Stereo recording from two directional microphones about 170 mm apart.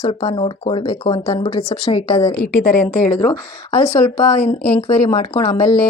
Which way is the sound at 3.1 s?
10° left (ahead or behind).